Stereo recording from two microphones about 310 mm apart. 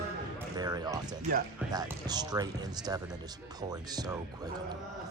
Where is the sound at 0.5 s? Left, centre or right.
Centre.